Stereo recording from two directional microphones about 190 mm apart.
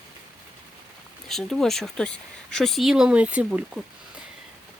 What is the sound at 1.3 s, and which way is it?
Speech, centre (ahead or behind).